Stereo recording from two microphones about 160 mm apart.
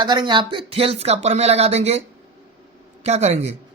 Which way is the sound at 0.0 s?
30° right (ahead or behind).